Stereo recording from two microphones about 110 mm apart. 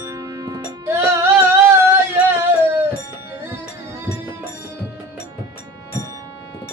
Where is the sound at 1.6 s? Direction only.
20° right (ahead or behind).